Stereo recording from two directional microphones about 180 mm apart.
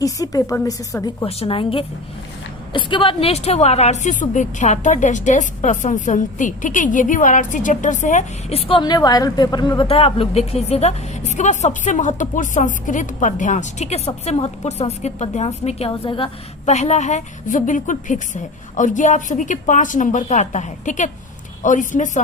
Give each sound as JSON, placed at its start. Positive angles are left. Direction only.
{"t": 0.0, "sound": "a woman's voice", "side_deg": 20}
{"t": 1.2, "sound": "a woman's voice", "side_deg": 30}